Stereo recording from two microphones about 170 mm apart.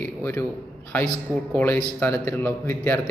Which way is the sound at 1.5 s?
10° left (ahead or behind).